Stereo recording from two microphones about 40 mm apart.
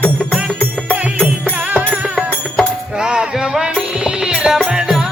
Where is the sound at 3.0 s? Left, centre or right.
Centre.